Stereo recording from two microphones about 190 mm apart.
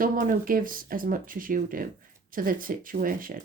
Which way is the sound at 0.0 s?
45° right (ahead or behind).